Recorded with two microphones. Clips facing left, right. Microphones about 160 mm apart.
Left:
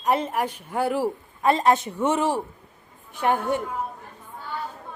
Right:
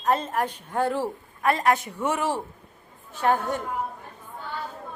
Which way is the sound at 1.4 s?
25° left (ahead or behind).